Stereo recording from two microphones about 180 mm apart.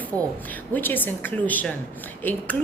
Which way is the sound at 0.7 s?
10° left (ahead or behind).